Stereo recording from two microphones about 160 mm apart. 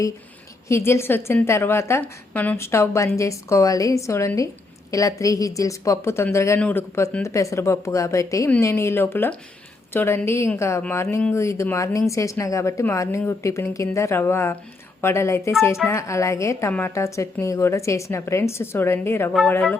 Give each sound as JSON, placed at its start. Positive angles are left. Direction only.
{"t": 0.7, "sound": "a woman's voice", "side_deg": 15}